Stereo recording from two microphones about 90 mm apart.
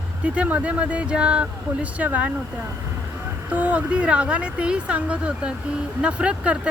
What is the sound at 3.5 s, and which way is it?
Speech, 15° right (ahead or behind).